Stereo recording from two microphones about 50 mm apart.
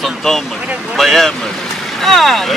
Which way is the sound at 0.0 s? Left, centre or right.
Centre.